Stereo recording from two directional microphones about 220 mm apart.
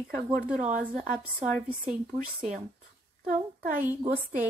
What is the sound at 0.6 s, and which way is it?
A woman's voice, 35° right (ahead or behind).